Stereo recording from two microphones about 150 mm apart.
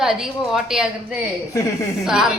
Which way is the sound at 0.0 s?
5° right (ahead or behind).